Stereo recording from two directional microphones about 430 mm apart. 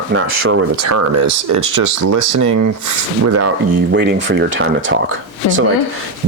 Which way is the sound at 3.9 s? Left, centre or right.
Right.